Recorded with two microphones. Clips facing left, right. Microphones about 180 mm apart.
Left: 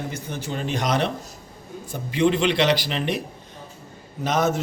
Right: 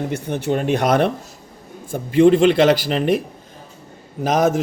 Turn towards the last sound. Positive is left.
turn(degrees=-50)  # may be behind; listen again after turning